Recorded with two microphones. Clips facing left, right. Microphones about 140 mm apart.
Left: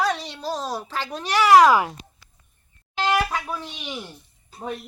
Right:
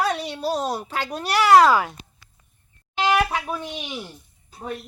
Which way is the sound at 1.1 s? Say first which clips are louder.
Even; 5° right (ahead or behind).